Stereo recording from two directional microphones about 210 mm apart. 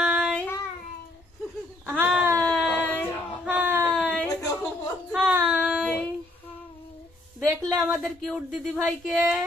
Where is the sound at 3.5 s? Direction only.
10° right (ahead or behind).